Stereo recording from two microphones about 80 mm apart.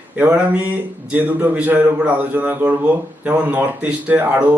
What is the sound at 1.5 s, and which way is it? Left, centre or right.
A man's voice, centre.